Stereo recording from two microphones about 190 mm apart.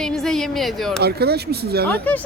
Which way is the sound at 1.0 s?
55° right (ahead or behind).